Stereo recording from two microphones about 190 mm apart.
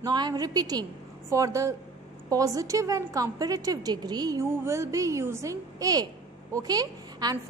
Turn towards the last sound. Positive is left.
turn(degrees=-20)  # may be behind; listen again after turning